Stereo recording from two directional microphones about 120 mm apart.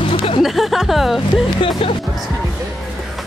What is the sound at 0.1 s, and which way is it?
Music, 50° left (ahead or behind).